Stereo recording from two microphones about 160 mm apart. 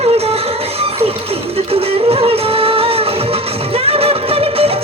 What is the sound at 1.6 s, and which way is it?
Music, 35° right (ahead or behind).